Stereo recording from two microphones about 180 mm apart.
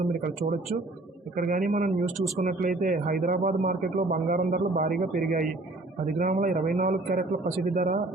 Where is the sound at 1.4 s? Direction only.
50° right (ahead or behind).